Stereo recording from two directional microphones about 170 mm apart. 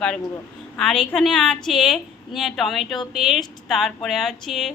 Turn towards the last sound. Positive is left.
turn(degrees=0)  # may be behind; listen again after turning